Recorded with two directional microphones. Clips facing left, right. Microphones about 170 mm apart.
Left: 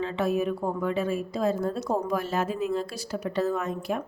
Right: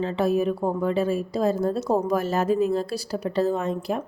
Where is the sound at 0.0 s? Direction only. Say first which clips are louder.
Right 4 dB; 35° right (ahead or behind).